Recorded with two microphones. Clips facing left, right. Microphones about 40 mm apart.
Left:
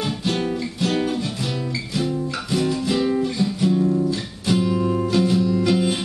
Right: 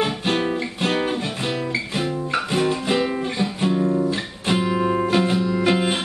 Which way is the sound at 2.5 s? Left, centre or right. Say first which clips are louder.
Left 1 dB; right.